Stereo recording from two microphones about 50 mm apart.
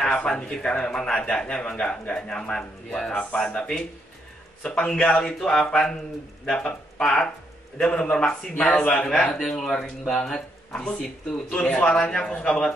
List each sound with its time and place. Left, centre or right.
0.0 s a man's voice: centre